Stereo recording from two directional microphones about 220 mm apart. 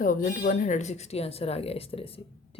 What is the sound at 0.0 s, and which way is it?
Speech, 40° left (ahead or behind).